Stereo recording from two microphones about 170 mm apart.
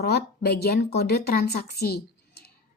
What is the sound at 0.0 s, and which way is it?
A woman's voice, 70° left (ahead or behind).